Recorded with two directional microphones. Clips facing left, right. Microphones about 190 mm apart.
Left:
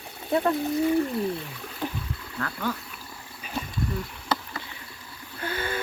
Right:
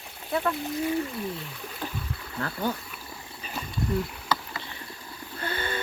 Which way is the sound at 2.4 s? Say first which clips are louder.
Right 1 dB; 30° right (ahead or behind).